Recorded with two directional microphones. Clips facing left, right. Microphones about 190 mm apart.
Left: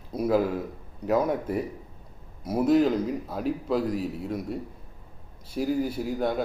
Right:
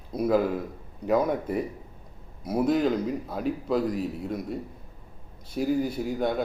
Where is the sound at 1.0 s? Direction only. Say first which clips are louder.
Even; 5° left (ahead or behind).